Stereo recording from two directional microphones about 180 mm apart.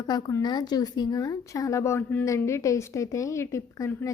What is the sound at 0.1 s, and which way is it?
Speech, 20° left (ahead or behind).